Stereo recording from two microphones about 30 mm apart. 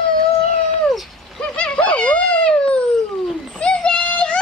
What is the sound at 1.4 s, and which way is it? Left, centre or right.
Dog, left.